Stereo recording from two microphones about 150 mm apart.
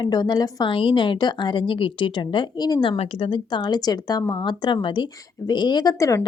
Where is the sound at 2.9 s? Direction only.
40° left (ahead or behind).